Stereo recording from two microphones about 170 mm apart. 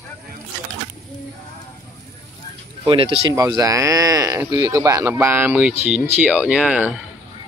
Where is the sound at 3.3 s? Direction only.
20° right (ahead or behind).